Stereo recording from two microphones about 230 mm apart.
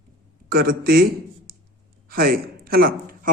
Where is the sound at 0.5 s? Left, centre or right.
Right.